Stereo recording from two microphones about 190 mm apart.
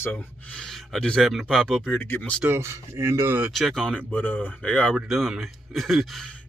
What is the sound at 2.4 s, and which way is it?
Speech, 10° right (ahead or behind).